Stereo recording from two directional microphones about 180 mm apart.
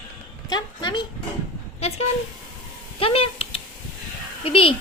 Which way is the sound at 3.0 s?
30° left (ahead or behind).